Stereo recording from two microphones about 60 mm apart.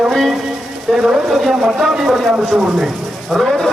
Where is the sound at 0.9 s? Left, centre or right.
Centre.